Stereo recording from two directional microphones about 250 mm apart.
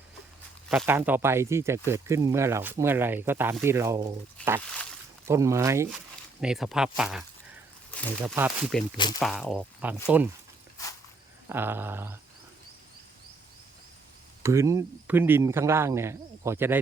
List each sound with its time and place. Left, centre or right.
0.7 s speech: centre
5.2 s speech: centre
9.0 s speech: centre
9.2 s speech: centre
11.4 s speech: centre
14.4 s speech: centre